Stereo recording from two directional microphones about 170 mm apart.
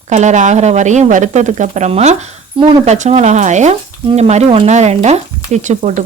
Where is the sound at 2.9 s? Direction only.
45° right (ahead or behind).